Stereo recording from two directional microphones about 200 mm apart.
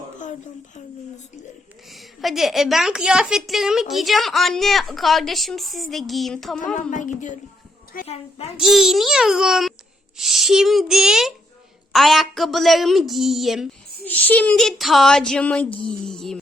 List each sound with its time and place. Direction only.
1.9 s a woman's voice: centre (ahead or behind)
6.9 s a woman's voice: 40° left (ahead or behind)
8.5 s a woman's voice: centre (ahead or behind)